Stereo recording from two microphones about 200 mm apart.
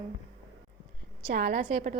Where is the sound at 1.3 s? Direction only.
60° right (ahead or behind).